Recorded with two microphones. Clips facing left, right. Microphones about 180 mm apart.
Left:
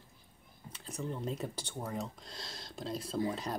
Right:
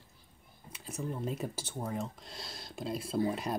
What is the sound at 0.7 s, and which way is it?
Speech, 10° right (ahead or behind).